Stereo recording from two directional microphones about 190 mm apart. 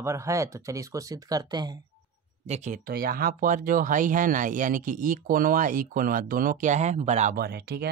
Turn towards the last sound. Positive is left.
turn(degrees=-55)  # may be behind; listen again after turning